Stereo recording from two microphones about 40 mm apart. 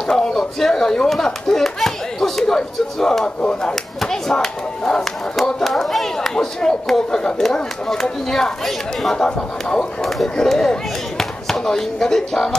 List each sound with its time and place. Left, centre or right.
0.0 s speech: centre
3.3 s speech: left
4.0 s speech: centre